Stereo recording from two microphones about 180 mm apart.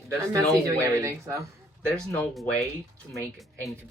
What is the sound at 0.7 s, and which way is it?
Speech, 15° right (ahead or behind).